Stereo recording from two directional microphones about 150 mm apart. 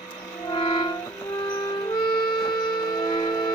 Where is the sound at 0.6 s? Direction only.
35° left (ahead or behind).